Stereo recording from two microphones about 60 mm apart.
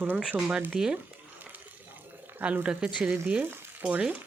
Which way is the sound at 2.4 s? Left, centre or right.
Right.